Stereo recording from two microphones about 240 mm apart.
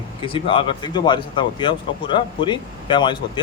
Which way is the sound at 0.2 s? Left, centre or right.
Left.